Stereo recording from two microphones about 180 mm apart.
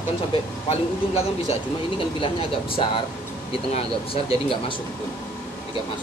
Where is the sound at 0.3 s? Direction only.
35° left (ahead or behind).